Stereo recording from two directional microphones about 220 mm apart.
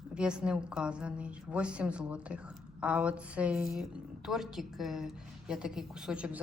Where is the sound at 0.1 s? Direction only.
5° right (ahead or behind).